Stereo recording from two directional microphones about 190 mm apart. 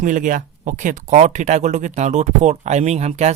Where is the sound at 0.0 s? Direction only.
45° right (ahead or behind).